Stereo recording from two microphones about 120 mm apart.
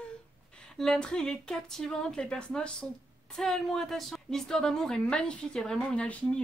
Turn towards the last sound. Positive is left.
turn(degrees=10)  # may be behind; listen again after turning